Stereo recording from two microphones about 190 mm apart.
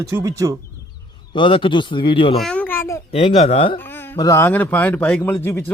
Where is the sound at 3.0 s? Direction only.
30° left (ahead or behind).